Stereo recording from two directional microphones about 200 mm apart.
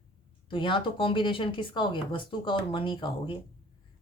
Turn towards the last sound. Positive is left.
turn(degrees=25)  # may be behind; listen again after turning